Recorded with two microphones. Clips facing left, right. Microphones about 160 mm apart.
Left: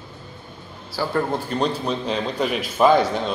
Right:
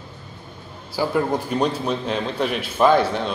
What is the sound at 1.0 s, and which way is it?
A man's voice, 10° right (ahead or behind).